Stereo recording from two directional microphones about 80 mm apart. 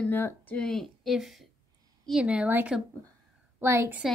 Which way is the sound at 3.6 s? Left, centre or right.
Right.